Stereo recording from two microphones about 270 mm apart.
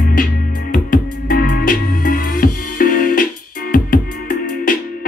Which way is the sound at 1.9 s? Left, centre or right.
Left.